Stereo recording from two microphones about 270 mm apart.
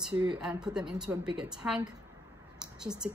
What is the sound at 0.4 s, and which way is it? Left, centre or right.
A woman's voice, centre.